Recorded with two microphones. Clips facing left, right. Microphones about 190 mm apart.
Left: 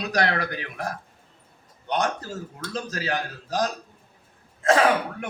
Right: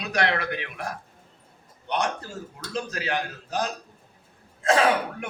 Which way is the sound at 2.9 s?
35° left (ahead or behind).